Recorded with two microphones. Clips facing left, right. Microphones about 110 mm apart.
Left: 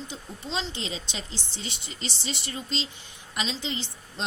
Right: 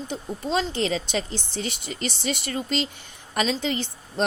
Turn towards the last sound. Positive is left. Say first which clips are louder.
# right 8 dB
turn(degrees=-50)  # may be behind; listen again after turning